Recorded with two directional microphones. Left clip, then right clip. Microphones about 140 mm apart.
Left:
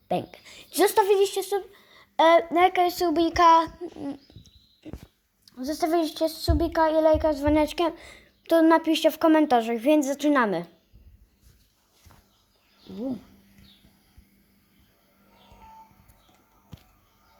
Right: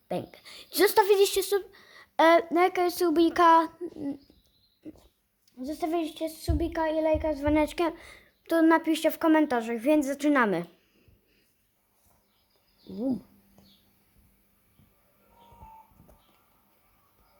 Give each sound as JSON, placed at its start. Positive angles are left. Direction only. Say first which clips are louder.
{"t": 0.1, "sound": "a child's voice", "louder": "left 6 dB", "side_deg": 5}
{"t": 0.4, "sound": "a woman's voice", "louder": "left 1 dB", "side_deg": -10}
{"t": 1.1, "sound": "a woman's voice", "louder": "even", "side_deg": -30}
{"t": 4.8, "sound": "a sound", "louder": "left 3 dB", "side_deg": -25}
{"t": 5.5, "sound": "a child's voice", "louder": "left 5 dB", "side_deg": 5}